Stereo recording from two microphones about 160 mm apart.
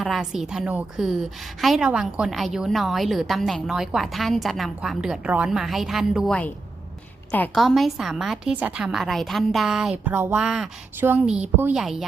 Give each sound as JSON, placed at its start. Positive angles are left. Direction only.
{"t": 0.0, "sound": "a woman's voice", "side_deg": 0}
{"t": 7.5, "sound": "a woman's voice", "side_deg": 0}
{"t": 10.9, "sound": "a woman's voice", "side_deg": -15}